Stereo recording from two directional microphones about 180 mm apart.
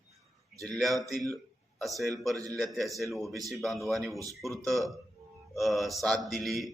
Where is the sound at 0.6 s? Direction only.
Centre (ahead or behind).